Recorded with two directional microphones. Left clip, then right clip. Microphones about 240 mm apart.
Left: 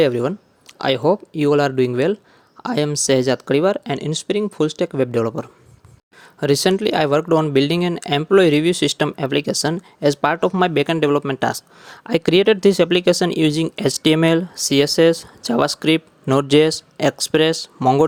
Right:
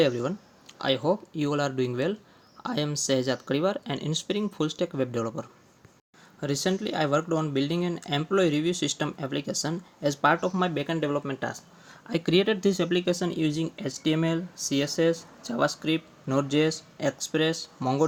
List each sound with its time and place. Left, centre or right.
0.0 s speech: left